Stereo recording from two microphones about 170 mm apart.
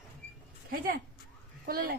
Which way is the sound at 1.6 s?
60° right (ahead or behind).